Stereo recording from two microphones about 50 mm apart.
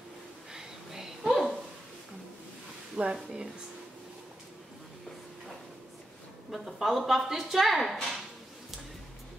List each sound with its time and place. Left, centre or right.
0.5 s a sound: centre
3.0 s speech: centre
6.5 s a woman's voice: centre